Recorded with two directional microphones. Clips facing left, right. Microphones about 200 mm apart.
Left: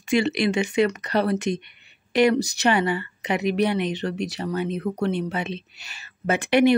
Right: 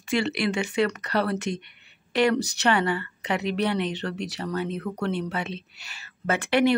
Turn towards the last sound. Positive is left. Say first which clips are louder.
# left 3 dB
turn(degrees=15)  # may be behind; listen again after turning